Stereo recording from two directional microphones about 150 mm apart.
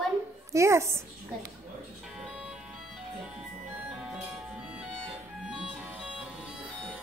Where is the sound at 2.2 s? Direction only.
Centre (ahead or behind).